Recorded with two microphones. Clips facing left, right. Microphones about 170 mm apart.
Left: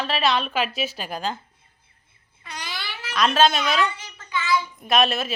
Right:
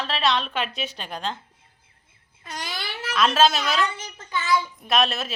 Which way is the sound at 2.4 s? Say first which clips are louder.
Right 2 dB; 45° right (ahead or behind).